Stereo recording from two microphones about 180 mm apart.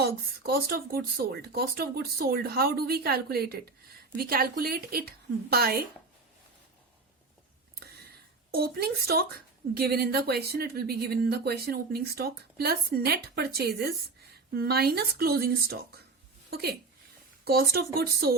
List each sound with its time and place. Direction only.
0.0 s speech: 60° right (ahead or behind)
8.5 s a woman's voice: 55° right (ahead or behind)